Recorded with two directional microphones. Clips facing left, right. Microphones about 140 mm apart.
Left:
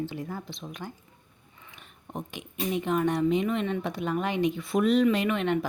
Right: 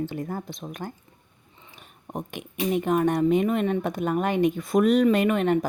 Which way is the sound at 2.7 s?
50° right (ahead or behind).